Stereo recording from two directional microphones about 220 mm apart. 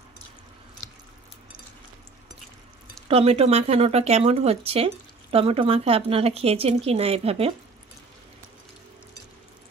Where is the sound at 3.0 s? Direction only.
25° right (ahead or behind).